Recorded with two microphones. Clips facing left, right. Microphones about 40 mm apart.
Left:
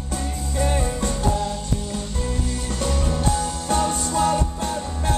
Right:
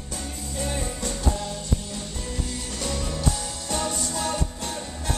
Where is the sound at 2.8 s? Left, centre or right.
Left.